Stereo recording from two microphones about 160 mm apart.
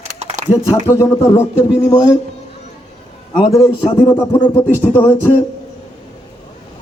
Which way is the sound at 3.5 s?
20° left (ahead or behind).